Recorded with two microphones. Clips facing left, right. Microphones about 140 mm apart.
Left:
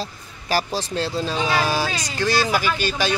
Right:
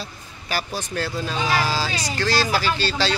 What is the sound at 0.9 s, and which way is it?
Speech, 25° left (ahead or behind).